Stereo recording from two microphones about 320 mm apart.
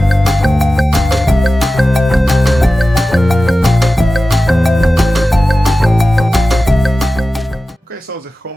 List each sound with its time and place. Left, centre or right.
0.0 s music: centre